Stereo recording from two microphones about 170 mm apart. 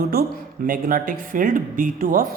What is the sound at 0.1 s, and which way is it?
Speech, 60° right (ahead or behind).